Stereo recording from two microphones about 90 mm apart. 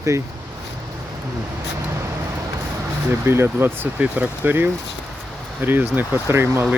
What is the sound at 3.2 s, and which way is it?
Speech, 25° right (ahead or behind).